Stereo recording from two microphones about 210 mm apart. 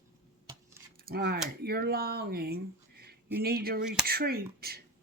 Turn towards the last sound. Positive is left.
turn(degrees=-50)  # may be behind; listen again after turning